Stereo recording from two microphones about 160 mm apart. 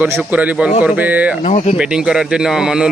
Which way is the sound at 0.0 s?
10° right (ahead or behind).